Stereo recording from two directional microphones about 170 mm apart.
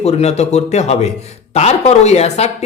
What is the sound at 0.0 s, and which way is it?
A man's voice, 40° left (ahead or behind).